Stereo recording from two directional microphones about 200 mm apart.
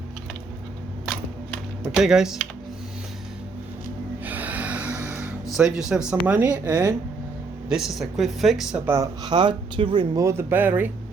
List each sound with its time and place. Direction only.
2.0 s speech: 5° right (ahead or behind)
4.3 s music: 10° right (ahead or behind)
5.5 s speech: centre (ahead or behind)
8.9 s speech: 15° right (ahead or behind)